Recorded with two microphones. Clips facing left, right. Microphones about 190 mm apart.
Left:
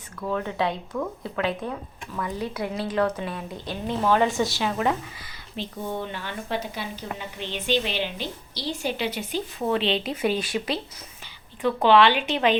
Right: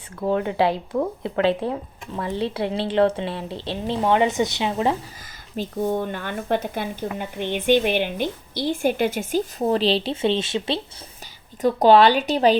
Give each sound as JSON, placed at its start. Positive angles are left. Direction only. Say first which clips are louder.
{"t": 0.2, "sound": "speech", "louder": "right 6 dB", "side_deg": -30}
{"t": 5.5, "sound": "speech", "louder": "right 7 dB", "side_deg": -45}
{"t": 11.6, "sound": "speech", "louder": "right 4 dB", "side_deg": -40}